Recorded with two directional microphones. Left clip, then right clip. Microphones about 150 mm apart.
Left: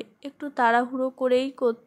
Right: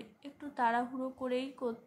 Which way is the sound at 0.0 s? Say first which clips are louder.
Left 12 dB; 50° left (ahead or behind).